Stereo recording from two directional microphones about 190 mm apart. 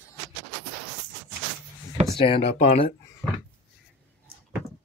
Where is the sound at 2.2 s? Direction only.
30° left (ahead or behind).